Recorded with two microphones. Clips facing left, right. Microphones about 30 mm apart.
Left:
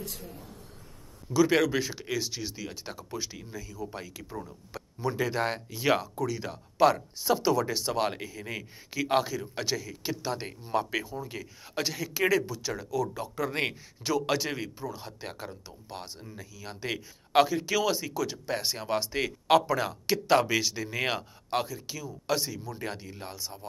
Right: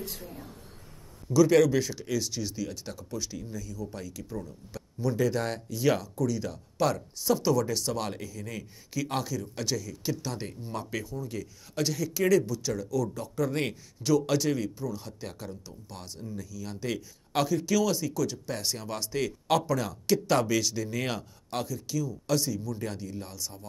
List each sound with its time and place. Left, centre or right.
1.3 s speech: left